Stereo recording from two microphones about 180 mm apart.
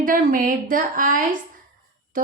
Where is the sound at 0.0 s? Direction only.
50° right (ahead or behind).